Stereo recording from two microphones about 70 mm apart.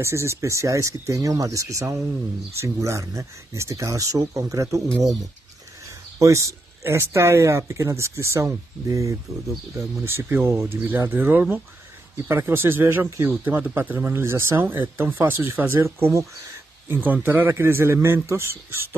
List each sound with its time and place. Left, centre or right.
0.0 s speech: right
6.1 s speech: right
8.8 s speech: right
10.0 s speech: right
11.1 s speech: right